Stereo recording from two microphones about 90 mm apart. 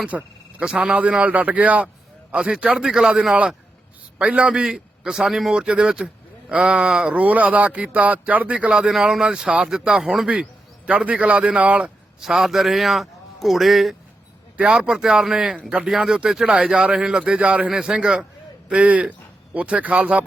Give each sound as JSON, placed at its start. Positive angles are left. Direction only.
{"t": 0.0, "sound": "a man's voice", "side_deg": -10}
{"t": 12.3, "sound": "a man's voice", "side_deg": -5}